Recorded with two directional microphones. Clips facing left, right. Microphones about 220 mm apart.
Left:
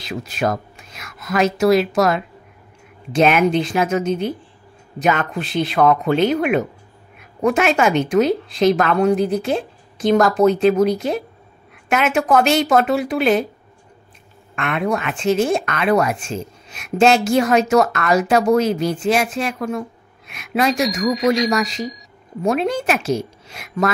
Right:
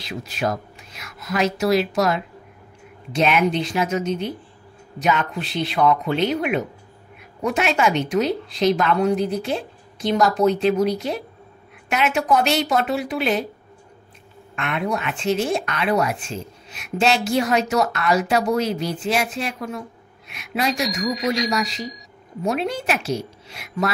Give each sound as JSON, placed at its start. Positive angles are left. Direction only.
{"t": 0.0, "sound": "a woman's voice", "side_deg": 50}
{"t": 14.5, "sound": "a woman's voice", "side_deg": 50}
{"t": 20.7, "sound": "speech", "side_deg": 0}
{"t": 21.5, "sound": "a woman's voice", "side_deg": 50}
{"t": 21.8, "sound": "speech", "side_deg": 0}
{"t": 22.4, "sound": "a woman's voice", "side_deg": 50}